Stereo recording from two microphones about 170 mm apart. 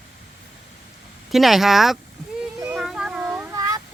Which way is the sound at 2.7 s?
5° right (ahead or behind).